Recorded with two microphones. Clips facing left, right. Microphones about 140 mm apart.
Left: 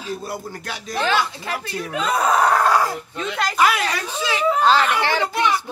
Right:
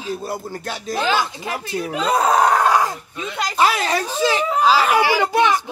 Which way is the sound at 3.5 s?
30° right (ahead or behind).